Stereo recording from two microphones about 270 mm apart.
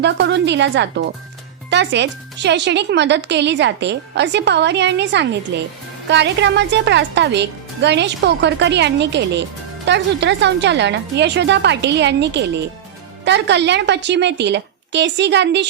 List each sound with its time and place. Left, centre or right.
0.0 s speech: right